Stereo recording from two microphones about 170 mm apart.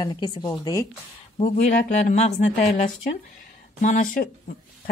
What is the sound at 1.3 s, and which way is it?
Speech, 45° left (ahead or behind).